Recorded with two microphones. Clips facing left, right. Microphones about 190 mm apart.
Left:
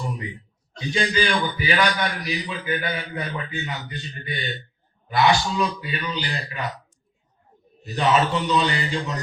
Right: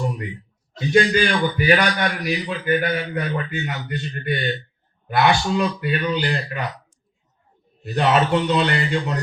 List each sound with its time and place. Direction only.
0.9 s a man's voice: 55° right (ahead or behind)
7.9 s speech: 60° right (ahead or behind)